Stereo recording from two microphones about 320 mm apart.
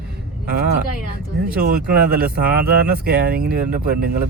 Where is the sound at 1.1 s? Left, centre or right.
Right.